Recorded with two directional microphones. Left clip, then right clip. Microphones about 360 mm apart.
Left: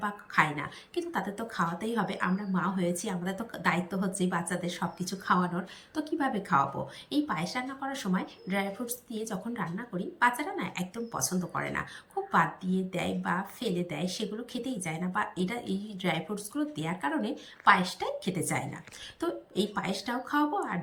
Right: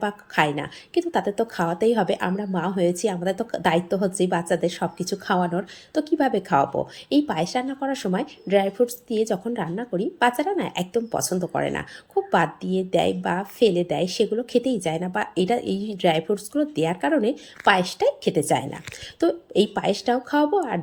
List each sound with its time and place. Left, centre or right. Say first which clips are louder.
0.0 s a woman's voice: right 5 dB; centre
19.5 s a woman's voice: right 9 dB; centre